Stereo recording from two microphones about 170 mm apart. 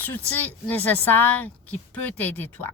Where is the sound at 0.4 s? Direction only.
10° left (ahead or behind).